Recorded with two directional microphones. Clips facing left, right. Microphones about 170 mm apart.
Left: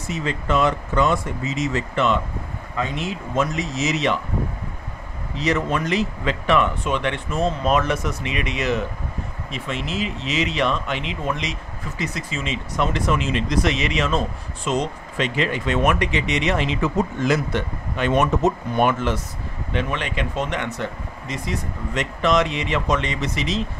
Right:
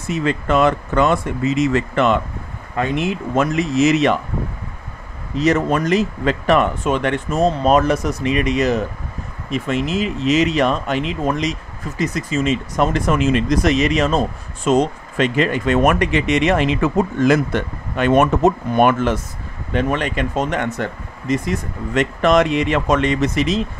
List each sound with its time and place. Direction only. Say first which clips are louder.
0.1 s speech: right 5 dB; 60° right (ahead or behind)
5.4 s speech: right 5 dB; 45° right (ahead or behind)